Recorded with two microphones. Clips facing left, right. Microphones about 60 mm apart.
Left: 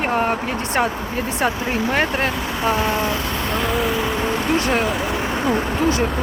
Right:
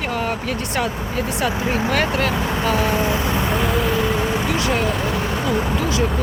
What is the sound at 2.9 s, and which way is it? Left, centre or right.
Speech, right.